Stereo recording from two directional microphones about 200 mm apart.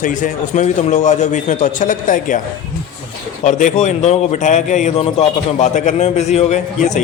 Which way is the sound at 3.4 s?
40° left (ahead or behind).